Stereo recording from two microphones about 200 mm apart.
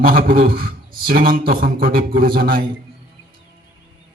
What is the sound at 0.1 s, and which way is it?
Speech, 50° right (ahead or behind).